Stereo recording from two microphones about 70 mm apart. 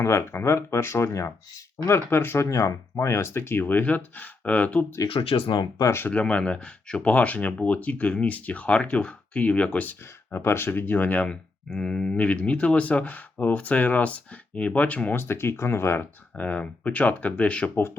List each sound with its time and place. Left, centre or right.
0.0 s speech: left
1.9 s speech: left
2.5 s speech: left
6.1 s speech: centre
10.3 s speech: left
11.3 s speech: centre
15.1 s speech: left
16.4 s speech: left